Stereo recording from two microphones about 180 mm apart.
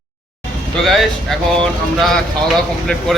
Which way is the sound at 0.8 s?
Centre (ahead or behind).